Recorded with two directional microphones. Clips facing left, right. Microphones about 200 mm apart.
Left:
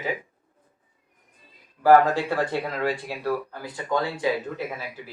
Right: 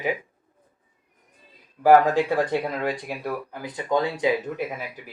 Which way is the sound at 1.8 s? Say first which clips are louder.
Right 1 dB; 15° right (ahead or behind).